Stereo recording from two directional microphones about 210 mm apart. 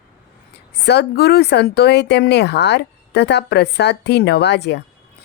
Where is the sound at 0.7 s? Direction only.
50° left (ahead or behind).